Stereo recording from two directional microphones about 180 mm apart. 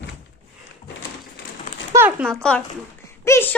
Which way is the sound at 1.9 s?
10° right (ahead or behind).